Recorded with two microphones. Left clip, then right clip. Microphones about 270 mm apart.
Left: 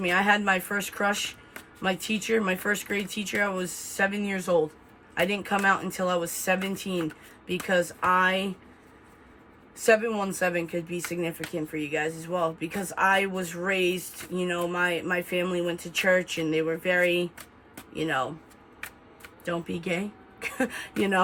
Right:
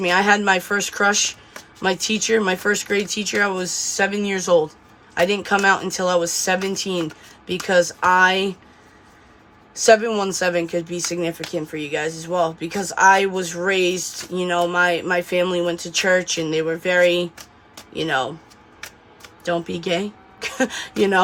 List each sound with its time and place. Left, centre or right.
0.0 s speech: centre
9.8 s speech: centre
19.5 s speech: centre